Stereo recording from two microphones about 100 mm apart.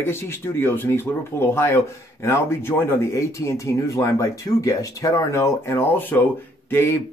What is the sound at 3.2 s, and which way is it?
Speech, 30° left (ahead or behind).